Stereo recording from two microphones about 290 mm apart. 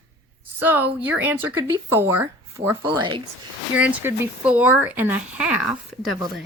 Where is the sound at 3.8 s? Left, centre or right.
Centre.